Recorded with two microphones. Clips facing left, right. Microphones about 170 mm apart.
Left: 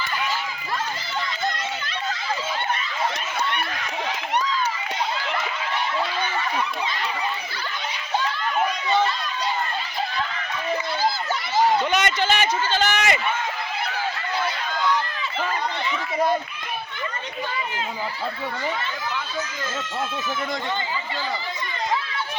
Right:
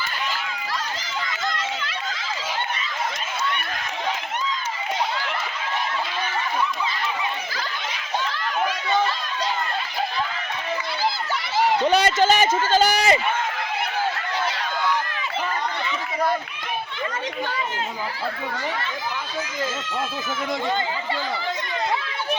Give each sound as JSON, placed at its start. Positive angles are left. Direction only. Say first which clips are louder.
{"t": 11.8, "sound": "run", "louder": "right 4 dB", "side_deg": -30}